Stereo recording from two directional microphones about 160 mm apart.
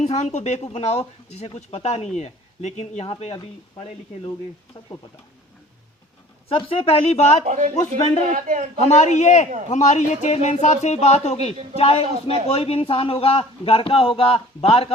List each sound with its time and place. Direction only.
0.0 s speech: 45° left (ahead or behind)
6.5 s a man's voice: 35° left (ahead or behind)
7.4 s a man's voice: 50° right (ahead or behind)
7.8 s speech: 45° left (ahead or behind)
8.3 s a man's voice: 45° right (ahead or behind)
8.8 s a man's voice: 45° left (ahead or behind)